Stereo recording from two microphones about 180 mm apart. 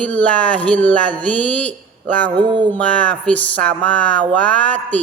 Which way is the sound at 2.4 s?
25° right (ahead or behind).